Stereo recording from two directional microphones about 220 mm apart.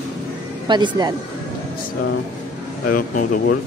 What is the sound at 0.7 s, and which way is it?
Speech, 20° right (ahead or behind).